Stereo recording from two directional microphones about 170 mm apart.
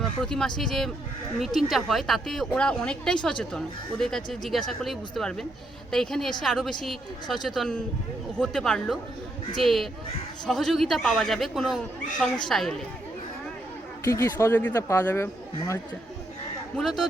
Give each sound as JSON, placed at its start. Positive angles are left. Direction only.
{"t": 0.2, "sound": "a woman's voice", "side_deg": 5}
{"t": 14.0, "sound": "speech", "side_deg": 15}
{"t": 16.7, "sound": "a woman's voice", "side_deg": 0}